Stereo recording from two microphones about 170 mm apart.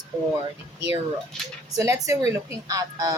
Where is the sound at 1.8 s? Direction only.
20° right (ahead or behind).